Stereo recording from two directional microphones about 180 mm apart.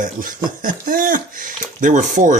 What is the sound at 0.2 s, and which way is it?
Speech, 50° right (ahead or behind).